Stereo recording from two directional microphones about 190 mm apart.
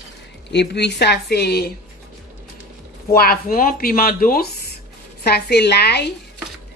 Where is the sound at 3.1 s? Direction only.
50° left (ahead or behind).